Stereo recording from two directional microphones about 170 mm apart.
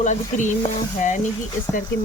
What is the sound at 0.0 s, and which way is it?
Speech, 45° left (ahead or behind).